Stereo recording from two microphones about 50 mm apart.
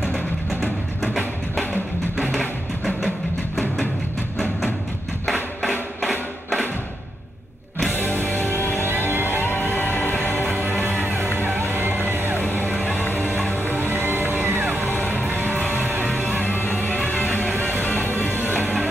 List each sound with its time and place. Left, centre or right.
0.5 s music: centre
5.2 s music: centre
5.9 s a sound: centre
7.9 s music: left
10.6 s music: right
12.4 s music: left
14.4 s music: right
14.9 s music: left
16.3 s music: left